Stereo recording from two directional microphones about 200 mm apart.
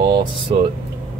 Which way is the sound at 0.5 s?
25° right (ahead or behind).